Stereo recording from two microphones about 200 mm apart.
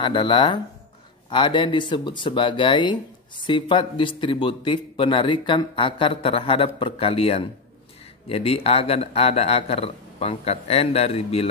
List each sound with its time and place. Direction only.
0.0 s speech: 25° left (ahead or behind)